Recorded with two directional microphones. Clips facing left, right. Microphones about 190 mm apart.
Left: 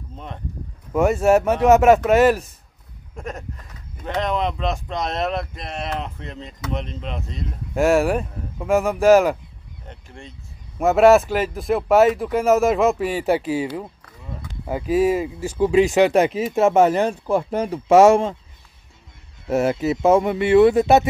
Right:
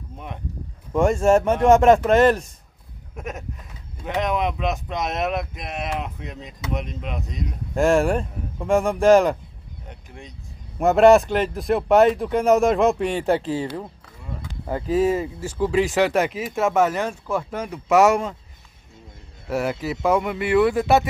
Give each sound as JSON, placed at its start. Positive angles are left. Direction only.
{"t": 0.9, "sound": "speech", "side_deg": 5}
{"t": 3.2, "sound": "speech", "side_deg": -5}
{"t": 10.8, "sound": "speech", "side_deg": 5}
{"t": 19.5, "sound": "speech", "side_deg": 25}